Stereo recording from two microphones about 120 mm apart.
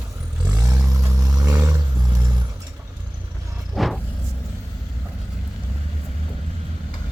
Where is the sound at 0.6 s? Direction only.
30° right (ahead or behind).